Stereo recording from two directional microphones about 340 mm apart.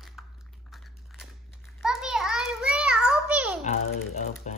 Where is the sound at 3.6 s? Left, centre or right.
Centre.